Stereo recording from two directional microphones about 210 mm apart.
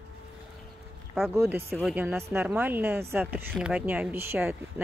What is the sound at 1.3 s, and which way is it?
Speech, 10° right (ahead or behind).